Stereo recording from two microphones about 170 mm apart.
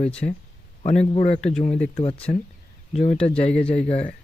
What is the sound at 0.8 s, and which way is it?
Speech, 40° left (ahead or behind).